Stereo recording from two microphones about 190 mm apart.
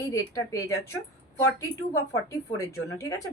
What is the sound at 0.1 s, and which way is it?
Speech, 15° left (ahead or behind).